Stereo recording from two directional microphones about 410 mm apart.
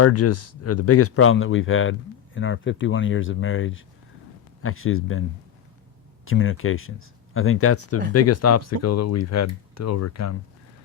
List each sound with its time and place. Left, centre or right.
0.0 s speech: left
6.2 s speech: left